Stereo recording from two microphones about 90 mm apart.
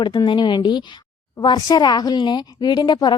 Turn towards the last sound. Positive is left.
turn(degrees=50)  # may be behind; listen again after turning